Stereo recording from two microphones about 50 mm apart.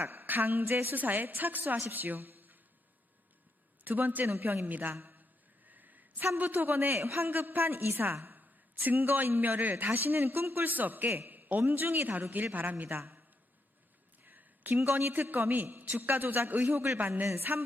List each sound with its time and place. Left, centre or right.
0.0 s a woman's voice: right
0.6 s a woman's voice: right
0.9 s a woman's voice: right
3.8 s speech: right
5.6 s a sound: right
6.3 s a woman's voice: right
14.3 s a sound: right
14.9 s speech: right